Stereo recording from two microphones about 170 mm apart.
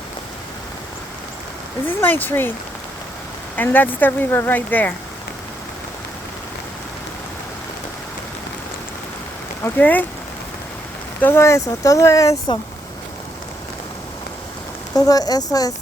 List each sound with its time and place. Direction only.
2.0 s speech: 10° left (ahead or behind)
3.5 s speech: 10° left (ahead or behind)
9.6 s speech: 10° left (ahead or behind)
11.2 s speech: 15° left (ahead or behind)
14.9 s speech: 20° left (ahead or behind)